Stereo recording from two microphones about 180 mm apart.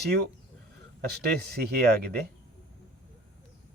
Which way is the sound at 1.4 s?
60° right (ahead or behind).